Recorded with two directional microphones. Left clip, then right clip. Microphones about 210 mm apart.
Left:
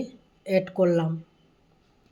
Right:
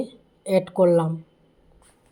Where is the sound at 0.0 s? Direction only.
15° right (ahead or behind).